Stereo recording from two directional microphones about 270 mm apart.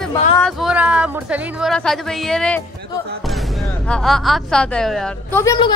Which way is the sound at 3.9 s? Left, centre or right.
Centre.